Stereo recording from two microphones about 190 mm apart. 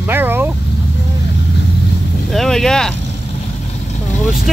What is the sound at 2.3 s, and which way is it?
Speech, centre (ahead or behind).